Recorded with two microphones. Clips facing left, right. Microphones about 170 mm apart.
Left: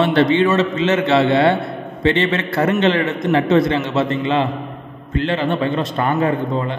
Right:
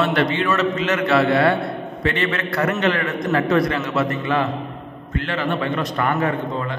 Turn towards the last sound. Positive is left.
turn(degrees=25)  # may be behind; listen again after turning